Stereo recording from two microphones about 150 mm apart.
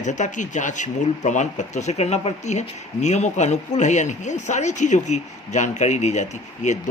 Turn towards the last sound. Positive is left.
turn(degrees=50)  # may be behind; listen again after turning